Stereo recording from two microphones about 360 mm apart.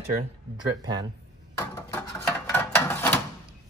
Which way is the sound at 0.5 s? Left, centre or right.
Centre.